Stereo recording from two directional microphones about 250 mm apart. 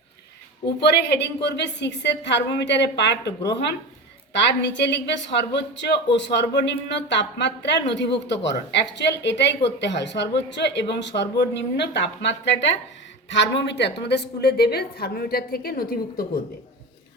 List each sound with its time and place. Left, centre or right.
0.8 s a woman's voice: left